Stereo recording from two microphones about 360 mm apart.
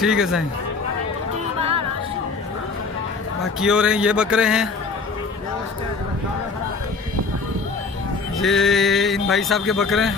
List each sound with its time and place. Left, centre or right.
0.0 s speech: centre
1.6 s music: centre
3.6 s speech: centre
8.4 s speech: centre